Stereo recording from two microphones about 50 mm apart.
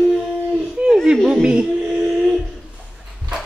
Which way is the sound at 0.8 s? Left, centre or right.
Right.